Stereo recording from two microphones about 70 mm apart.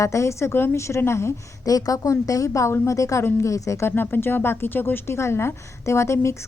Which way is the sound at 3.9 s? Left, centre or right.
Left.